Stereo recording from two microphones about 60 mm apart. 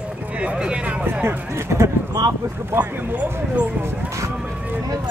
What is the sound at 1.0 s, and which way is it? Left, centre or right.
Speech, right.